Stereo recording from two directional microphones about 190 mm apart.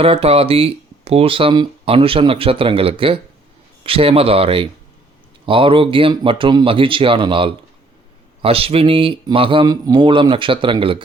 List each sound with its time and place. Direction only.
0.0 s speech: 30° right (ahead or behind)